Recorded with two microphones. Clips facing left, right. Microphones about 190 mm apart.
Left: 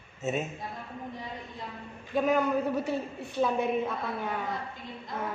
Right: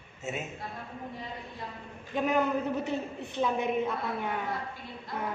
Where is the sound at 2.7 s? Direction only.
20° right (ahead or behind).